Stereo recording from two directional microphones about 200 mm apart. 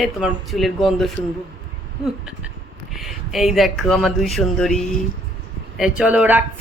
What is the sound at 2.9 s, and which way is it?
A woman's voice, centre (ahead or behind).